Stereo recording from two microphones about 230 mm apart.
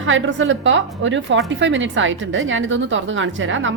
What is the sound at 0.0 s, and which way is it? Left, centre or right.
A woman's voice, right.